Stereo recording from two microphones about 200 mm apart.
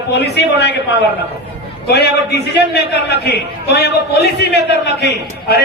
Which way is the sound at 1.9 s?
55° left (ahead or behind).